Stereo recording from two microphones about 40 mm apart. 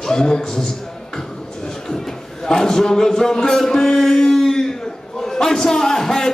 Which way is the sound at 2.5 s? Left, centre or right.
Centre.